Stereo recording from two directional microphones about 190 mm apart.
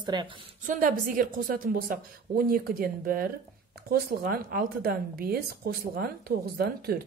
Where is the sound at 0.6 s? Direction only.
45° right (ahead or behind).